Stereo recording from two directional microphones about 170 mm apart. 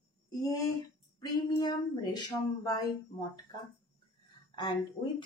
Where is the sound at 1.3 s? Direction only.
25° left (ahead or behind).